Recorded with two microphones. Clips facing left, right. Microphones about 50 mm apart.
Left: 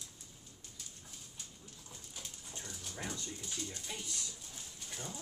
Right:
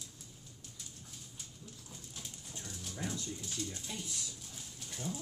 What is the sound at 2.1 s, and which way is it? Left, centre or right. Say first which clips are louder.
Dog: even; centre.